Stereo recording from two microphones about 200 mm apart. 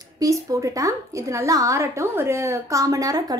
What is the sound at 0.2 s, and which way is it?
A woman's voice, 15° right (ahead or behind).